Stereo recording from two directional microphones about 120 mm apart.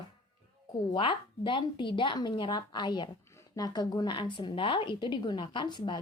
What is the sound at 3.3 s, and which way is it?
Speech, 25° left (ahead or behind).